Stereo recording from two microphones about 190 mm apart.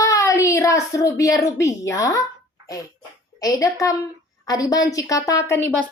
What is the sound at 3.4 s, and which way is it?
Speech, 20° left (ahead or behind).